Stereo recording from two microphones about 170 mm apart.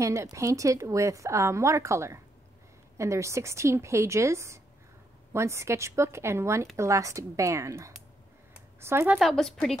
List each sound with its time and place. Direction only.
0.0 s a woman's voice: 20° right (ahead or behind)
9.3 s a woman's voice: centre (ahead or behind)